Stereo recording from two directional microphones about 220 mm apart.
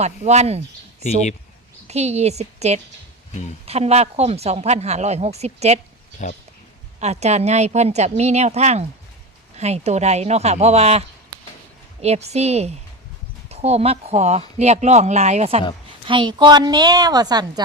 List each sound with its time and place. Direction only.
0.0 s speech: 30° right (ahead or behind)
1.9 s speech: 30° right (ahead or behind)
6.2 s speech: 35° left (ahead or behind)
7.0 s a woman's voice: 30° right (ahead or behind)